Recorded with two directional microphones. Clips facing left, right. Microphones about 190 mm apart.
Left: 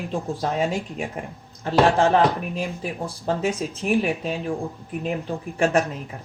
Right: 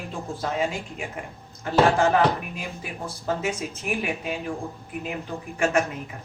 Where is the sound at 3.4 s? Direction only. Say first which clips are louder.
Left 4 dB; 35° left (ahead or behind).